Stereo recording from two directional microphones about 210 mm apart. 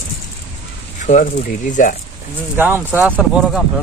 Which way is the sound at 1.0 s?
35° left (ahead or behind).